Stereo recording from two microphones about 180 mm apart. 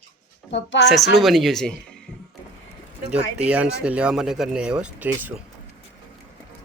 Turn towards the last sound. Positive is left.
turn(degrees=-10)  # may be behind; listen again after turning